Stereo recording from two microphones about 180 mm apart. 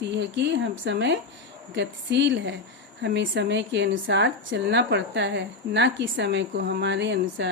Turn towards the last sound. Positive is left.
turn(degrees=-75)  # may be behind; listen again after turning